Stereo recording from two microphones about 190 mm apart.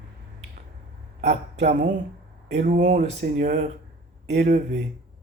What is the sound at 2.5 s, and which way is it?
Mantra, 40° right (ahead or behind).